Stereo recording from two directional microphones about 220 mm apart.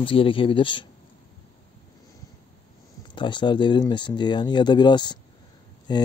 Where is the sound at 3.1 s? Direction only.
20° left (ahead or behind).